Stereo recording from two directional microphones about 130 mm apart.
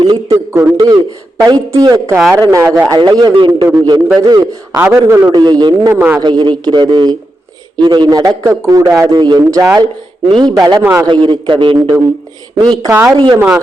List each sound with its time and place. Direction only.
0.0 s a man's voice: 35° right (ahead or behind)
0.5 s speech: 20° right (ahead or behind)
3.0 s a man's voice: 35° right (ahead or behind)
5.3 s a man's voice: 30° right (ahead or behind)
5.9 s a man's voice: 15° right (ahead or behind)
6.2 s a man's voice: 35° right (ahead or behind)
9.1 s a man's voice: 35° right (ahead or behind)
9.4 s a man's voice: 25° right (ahead or behind)
10.8 s speech: 20° right (ahead or behind)
11.1 s a man's voice: 40° right (ahead or behind)